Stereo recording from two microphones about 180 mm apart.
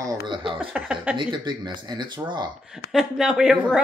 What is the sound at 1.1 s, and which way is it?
Speech, 25° right (ahead or behind).